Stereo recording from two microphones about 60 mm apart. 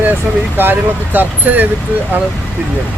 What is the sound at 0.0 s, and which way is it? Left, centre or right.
Speech, right.